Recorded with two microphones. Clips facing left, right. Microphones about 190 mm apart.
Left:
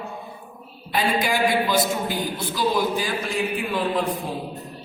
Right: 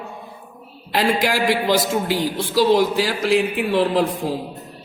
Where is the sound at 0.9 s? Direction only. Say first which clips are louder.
Right 3 dB; 90° right.